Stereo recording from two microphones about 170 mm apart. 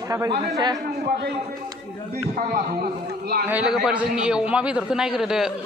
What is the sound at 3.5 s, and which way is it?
A man's voice, 5° right (ahead or behind).